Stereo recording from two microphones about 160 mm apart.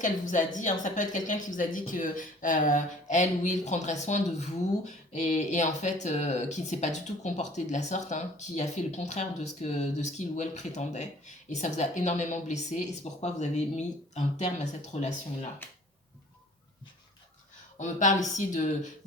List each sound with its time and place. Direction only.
0.0 s speech: 55° left (ahead or behind)
17.7 s speech: 50° left (ahead or behind)